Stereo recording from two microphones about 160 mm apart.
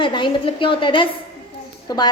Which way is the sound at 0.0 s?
30° left (ahead or behind).